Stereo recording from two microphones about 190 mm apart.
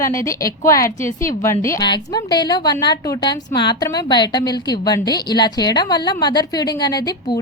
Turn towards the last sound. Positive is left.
turn(degrees=20)  # may be behind; listen again after turning